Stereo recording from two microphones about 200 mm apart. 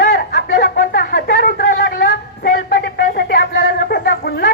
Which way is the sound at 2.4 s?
55° left (ahead or behind).